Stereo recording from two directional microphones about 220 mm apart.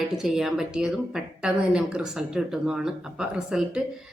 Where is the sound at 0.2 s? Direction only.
Centre (ahead or behind).